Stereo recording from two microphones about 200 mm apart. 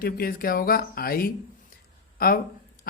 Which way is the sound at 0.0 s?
45° left (ahead or behind).